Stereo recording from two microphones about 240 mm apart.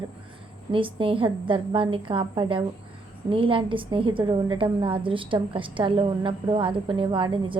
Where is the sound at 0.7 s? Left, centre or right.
Right.